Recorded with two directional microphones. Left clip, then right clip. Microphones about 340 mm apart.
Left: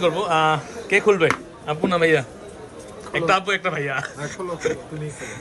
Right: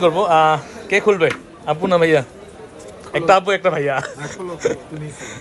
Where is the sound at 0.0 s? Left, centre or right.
Centre.